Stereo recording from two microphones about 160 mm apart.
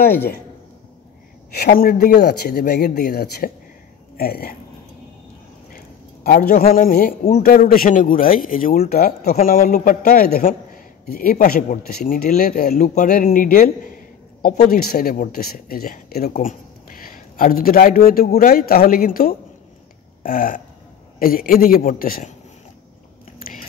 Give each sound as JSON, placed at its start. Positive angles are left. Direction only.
{"t": 1.5, "sound": "speech", "side_deg": 70}
{"t": 5.7, "sound": "a sound", "side_deg": 65}
{"t": 6.7, "sound": "a man's voice", "side_deg": 60}
{"t": 12.8, "sound": "a man's voice", "side_deg": 50}